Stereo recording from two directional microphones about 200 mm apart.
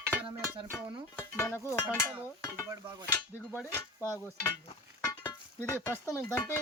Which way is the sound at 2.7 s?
20° right (ahead or behind).